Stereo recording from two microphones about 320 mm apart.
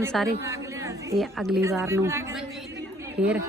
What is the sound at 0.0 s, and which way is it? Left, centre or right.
Speech, centre.